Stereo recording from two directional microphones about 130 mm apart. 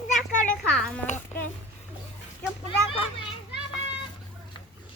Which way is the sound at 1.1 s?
65° left (ahead or behind).